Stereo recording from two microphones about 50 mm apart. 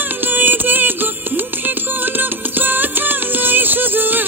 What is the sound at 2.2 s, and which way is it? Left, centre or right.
Music, right.